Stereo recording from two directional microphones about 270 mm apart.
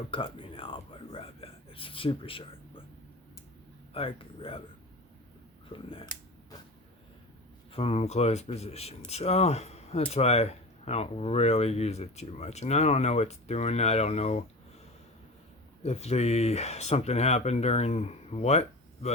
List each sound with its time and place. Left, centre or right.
0.1 s whispering: centre
3.9 s speech: centre
5.6 s speech: centre
7.7 s speech: left
15.8 s speech: left